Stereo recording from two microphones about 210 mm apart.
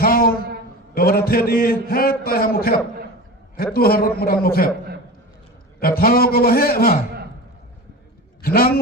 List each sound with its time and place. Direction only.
0.0 s a sound: 45° left (ahead or behind)
0.9 s a man's voice: 45° left (ahead or behind)
6.0 s a man's voice: 45° left (ahead or behind)
8.4 s a man's voice: 45° left (ahead or behind)